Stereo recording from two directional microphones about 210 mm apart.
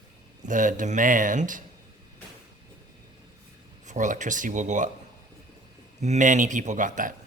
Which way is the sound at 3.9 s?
35° right (ahead or behind).